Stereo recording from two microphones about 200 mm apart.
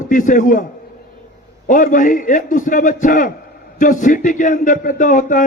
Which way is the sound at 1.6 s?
40° left (ahead or behind).